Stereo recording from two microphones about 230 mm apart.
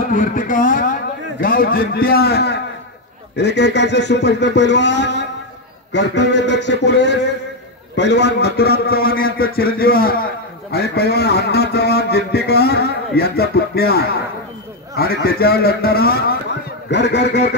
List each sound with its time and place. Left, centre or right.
0.1 s a man's voice: left